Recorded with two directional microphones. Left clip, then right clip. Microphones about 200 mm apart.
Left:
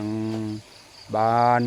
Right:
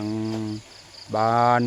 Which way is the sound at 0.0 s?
Centre (ahead or behind).